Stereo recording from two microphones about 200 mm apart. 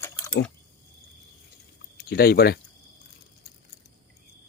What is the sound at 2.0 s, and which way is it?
Speech, 50° left (ahead or behind).